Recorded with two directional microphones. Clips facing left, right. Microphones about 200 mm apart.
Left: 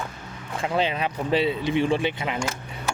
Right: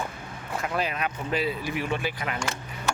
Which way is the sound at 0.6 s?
25° left (ahead or behind).